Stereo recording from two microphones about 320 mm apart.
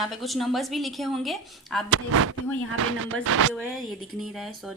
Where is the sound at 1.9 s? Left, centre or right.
Right.